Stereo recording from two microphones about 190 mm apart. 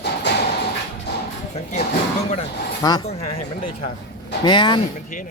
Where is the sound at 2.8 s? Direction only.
20° left (ahead or behind).